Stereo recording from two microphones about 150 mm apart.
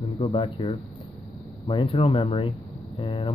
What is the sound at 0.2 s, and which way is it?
Speech, 45° left (ahead or behind).